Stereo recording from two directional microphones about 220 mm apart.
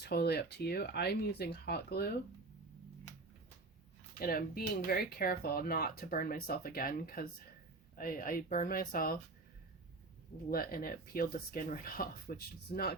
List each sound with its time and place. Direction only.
0.0 s speech: 45° left (ahead or behind)
4.2 s speech: 40° left (ahead or behind)
10.5 s speech: 40° left (ahead or behind)